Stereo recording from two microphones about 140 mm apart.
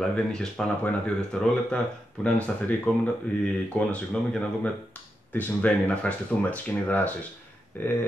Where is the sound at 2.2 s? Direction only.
5° left (ahead or behind).